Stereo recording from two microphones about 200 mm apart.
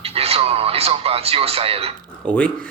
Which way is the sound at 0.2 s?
30° right (ahead or behind).